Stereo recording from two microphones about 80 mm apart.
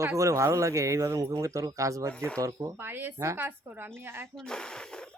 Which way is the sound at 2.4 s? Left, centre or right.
Right.